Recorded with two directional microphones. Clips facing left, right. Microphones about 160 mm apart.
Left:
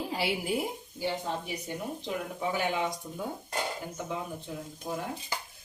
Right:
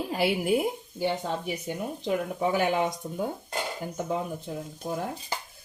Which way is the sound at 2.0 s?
50° right (ahead or behind).